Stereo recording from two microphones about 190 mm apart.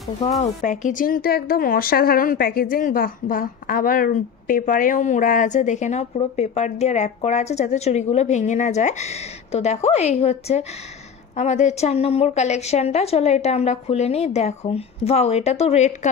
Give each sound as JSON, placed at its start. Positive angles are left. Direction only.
{"t": 0.4, "sound": "a woman's voice", "side_deg": 40}